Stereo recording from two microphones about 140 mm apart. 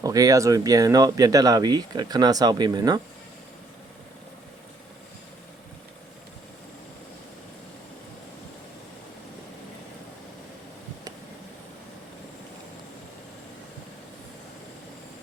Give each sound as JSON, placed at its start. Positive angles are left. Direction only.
{"t": 0.0, "sound": "speech", "side_deg": -25}